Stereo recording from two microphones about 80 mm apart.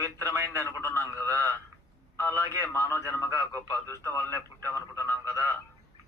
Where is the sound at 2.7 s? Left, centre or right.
Left.